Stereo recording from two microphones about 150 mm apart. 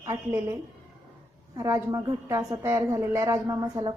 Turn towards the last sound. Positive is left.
turn(degrees=-25)  # may be behind; listen again after turning